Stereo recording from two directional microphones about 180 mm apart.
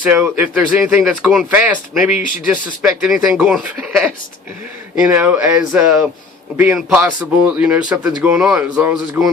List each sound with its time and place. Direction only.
0.0 s speech: 10° right (ahead or behind)
2.1 s speech: 45° left (ahead or behind)
2.5 s speech: 5° right (ahead or behind)